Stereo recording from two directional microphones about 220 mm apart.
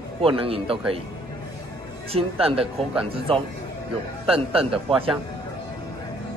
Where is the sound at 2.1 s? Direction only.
25° right (ahead or behind).